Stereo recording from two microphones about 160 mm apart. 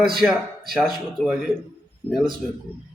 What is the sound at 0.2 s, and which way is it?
Speech, 10° right (ahead or behind).